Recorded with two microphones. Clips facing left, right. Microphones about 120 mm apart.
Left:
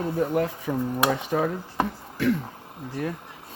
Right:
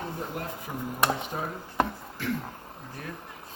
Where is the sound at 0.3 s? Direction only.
90° left.